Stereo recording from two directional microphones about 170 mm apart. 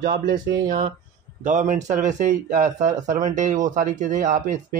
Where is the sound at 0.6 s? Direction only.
50° right (ahead or behind).